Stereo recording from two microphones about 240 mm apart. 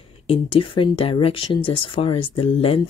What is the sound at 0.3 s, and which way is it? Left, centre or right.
Speech, left.